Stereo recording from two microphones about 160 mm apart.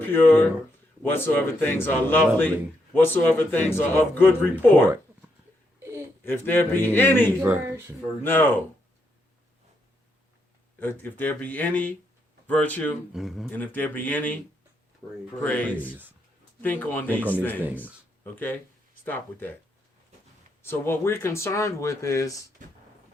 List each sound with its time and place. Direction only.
0.0 s a man's voice: 10° left (ahead or behind)
6.2 s a man's voice: 10° left (ahead or behind)
7.4 s speech: 15° right (ahead or behind)
8.2 s a man's voice: 10° left (ahead or behind)
10.8 s a man's voice: 10° left (ahead or behind)
13.1 s speech: centre (ahead or behind)
13.5 s a man's voice: 10° left (ahead or behind)
15.4 s a man's voice: 10° left (ahead or behind)
17.2 s speech: 10° right (ahead or behind)
18.2 s a man's voice: 10° left (ahead or behind)
20.6 s a man's voice: 15° left (ahead or behind)
22.6 s music: 55° right (ahead or behind)